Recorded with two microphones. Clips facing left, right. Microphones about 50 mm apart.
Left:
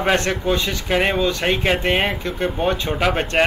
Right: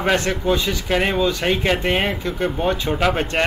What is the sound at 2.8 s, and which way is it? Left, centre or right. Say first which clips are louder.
Speech: right 1 dB; centre.